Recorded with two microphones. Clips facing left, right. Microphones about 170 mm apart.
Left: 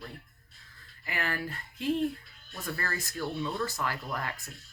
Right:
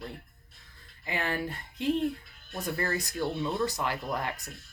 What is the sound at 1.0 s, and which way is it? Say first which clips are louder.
Speech: right 3 dB; 20° right (ahead or behind).